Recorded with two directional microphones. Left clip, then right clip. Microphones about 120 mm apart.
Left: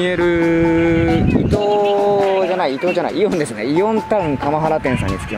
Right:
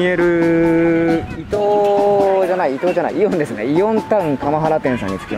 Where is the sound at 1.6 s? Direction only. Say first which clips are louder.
Right 3 dB; 20° left (ahead or behind).